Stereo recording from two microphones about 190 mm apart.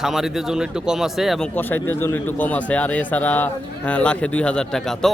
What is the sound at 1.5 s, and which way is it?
A man's voice, 10° left (ahead or behind).